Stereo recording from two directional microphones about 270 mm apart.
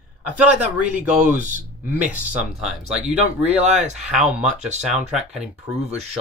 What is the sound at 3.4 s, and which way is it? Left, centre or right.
Speech, right.